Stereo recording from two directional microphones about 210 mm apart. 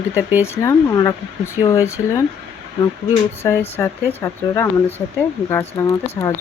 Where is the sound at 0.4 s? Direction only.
15° left (ahead or behind).